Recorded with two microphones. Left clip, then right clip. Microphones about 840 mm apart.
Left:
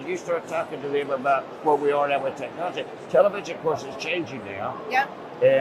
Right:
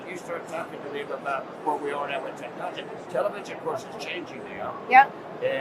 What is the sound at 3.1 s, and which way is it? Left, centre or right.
Speech, left.